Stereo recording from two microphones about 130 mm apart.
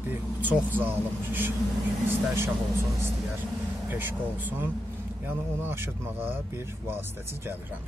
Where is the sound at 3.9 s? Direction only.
15° right (ahead or behind).